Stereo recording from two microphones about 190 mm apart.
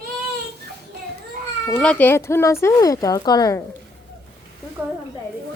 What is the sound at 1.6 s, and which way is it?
Speech, 5° left (ahead or behind).